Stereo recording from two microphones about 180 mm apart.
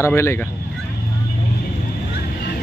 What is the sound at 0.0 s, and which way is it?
Speech, 15° left (ahead or behind).